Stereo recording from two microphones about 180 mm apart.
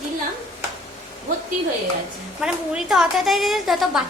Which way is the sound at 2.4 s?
5° right (ahead or behind).